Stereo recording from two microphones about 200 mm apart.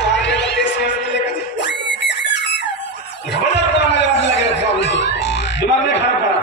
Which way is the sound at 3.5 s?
60° left (ahead or behind).